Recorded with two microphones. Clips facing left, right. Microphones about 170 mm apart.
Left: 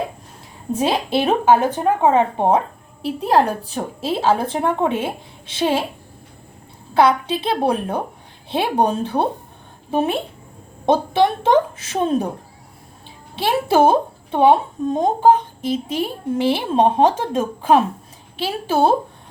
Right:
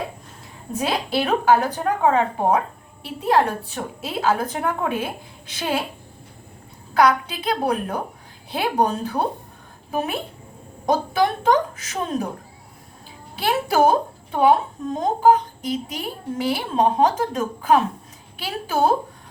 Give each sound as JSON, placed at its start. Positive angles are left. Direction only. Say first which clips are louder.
{"t": 0.7, "sound": "a woman's voice", "louder": "left 4 dB", "side_deg": 25}
{"t": 6.9, "sound": "a woman's voice", "louder": "left 2 dB", "side_deg": 25}
{"t": 13.3, "sound": "a woman's voice", "louder": "left 3 dB", "side_deg": 25}